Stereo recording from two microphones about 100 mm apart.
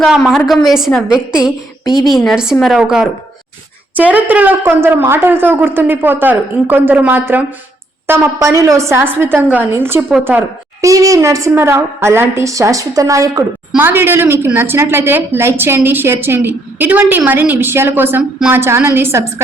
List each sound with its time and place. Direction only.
0.0 s a woman's voice: centre (ahead or behind); by 10.0 s 25° right (ahead or behind)
10.8 s a woman's voice: 35° right (ahead or behind)
13.7 s a woman's voice: 20° right (ahead or behind)